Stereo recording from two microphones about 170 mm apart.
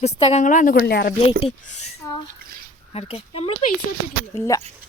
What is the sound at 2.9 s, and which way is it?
Speech, 35° left (ahead or behind).